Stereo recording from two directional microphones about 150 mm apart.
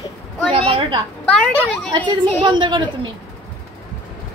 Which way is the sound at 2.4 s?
35° right (ahead or behind).